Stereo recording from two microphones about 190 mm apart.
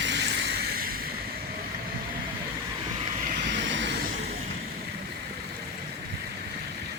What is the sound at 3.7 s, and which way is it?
Vehicle, 70° right (ahead or behind).